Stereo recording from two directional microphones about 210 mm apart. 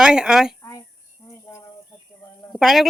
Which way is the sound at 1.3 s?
15° left (ahead or behind).